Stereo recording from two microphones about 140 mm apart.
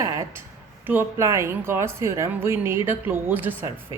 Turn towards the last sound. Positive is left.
turn(degrees=-15)  # may be behind; listen again after turning